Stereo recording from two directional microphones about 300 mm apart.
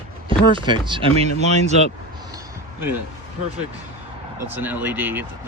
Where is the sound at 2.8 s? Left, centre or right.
Centre.